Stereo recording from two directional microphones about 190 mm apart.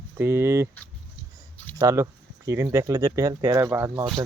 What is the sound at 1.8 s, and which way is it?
Speech, 15° right (ahead or behind).